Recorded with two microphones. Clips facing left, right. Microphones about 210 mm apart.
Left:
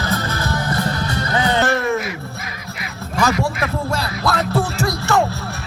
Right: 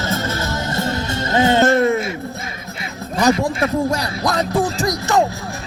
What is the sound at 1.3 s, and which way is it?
Music, 25° right (ahead or behind).